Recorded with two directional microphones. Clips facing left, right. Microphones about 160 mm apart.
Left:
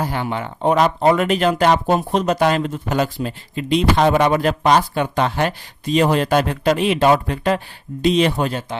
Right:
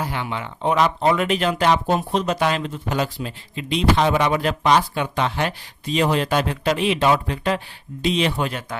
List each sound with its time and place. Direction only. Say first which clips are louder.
0.0 s speech: left 4 dB; 40° left (ahead or behind)